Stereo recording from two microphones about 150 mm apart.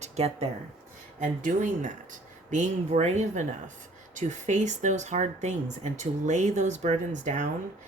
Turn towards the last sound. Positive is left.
turn(degrees=-55)  # may be behind; listen again after turning